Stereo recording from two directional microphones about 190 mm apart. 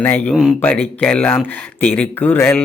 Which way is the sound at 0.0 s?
5° left (ahead or behind).